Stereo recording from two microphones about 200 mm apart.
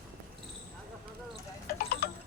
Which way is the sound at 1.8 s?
50° left (ahead or behind).